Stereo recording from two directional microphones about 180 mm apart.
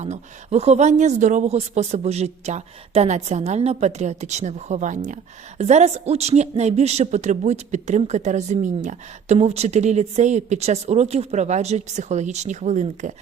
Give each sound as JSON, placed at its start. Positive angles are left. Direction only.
{"t": 0.0, "sound": "speech", "side_deg": -35}